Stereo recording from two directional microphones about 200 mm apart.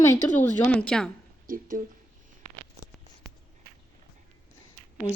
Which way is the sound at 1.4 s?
45° right (ahead or behind).